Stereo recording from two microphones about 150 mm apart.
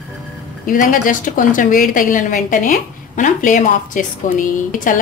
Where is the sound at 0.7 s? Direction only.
60° left (ahead or behind).